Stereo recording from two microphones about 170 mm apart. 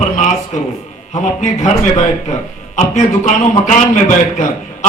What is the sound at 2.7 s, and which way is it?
A man's voice, 45° left (ahead or behind).